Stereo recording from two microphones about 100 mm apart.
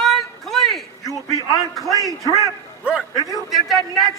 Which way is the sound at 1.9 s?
35° right (ahead or behind).